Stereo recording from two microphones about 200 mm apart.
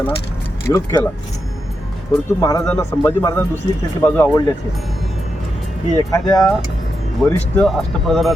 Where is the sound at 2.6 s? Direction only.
5° left (ahead or behind).